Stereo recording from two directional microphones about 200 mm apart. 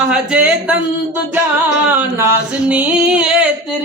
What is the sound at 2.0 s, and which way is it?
Singing, 10° right (ahead or behind).